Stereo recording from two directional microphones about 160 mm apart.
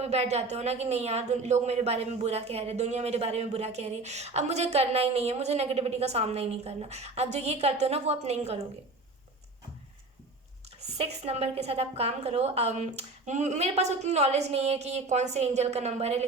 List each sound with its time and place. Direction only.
0.0 s a woman's voice: 40° right (ahead or behind)
10.8 s a woman's voice: 40° right (ahead or behind)